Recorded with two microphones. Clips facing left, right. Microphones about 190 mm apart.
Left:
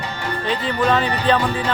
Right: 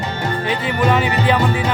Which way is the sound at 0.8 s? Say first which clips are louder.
Right 2 dB; 10° right (ahead or behind).